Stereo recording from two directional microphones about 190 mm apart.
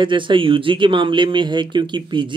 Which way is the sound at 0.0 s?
25° right (ahead or behind).